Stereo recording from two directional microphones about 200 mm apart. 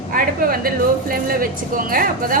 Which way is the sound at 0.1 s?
45° right (ahead or behind).